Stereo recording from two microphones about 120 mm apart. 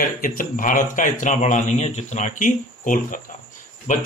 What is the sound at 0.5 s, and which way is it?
Speech, 90° left.